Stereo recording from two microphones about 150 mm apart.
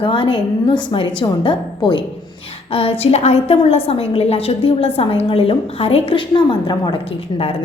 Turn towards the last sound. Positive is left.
turn(degrees=30)  # may be behind; listen again after turning